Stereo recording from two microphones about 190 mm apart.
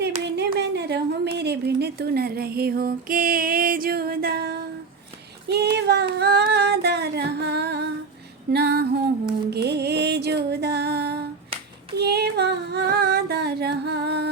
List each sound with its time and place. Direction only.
0.3 s a woman's voice: 60° right (ahead or behind)
5.5 s female singing: 60° right (ahead or behind)
9.5 s music: 60° right (ahead or behind)
11.9 s female singing: 60° right (ahead or behind)